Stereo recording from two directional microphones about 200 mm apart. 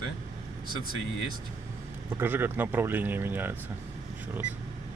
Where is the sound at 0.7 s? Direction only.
90° left.